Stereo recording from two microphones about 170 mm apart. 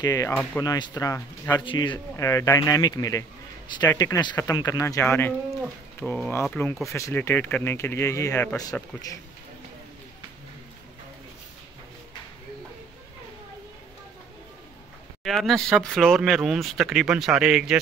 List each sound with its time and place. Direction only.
0.0 s speech: 20° left (ahead or behind)
1.6 s speech: 30° left (ahead or behind)
2.1 s a man's voice: 20° left (ahead or behind)
15.2 s speech: centre (ahead or behind)